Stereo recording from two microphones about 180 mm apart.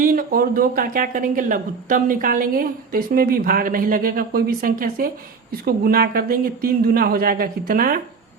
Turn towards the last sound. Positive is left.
turn(degrees=-50)  # may be behind; listen again after turning